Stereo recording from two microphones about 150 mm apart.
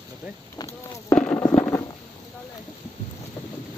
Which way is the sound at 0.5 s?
20° left (ahead or behind).